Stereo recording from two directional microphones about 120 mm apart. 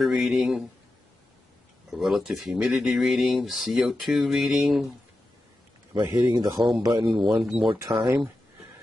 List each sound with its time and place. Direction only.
0.0 s speech: centre (ahead or behind)
1.9 s speech: centre (ahead or behind)
5.9 s speech: 35° right (ahead or behind)
7.4 s speech: 5° right (ahead or behind)